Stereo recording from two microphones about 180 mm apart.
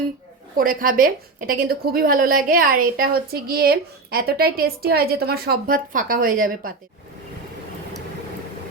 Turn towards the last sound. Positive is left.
turn(degrees=-50)  # may be behind; listen again after turning